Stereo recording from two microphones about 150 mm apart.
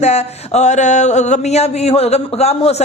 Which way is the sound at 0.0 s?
45° left (ahead or behind).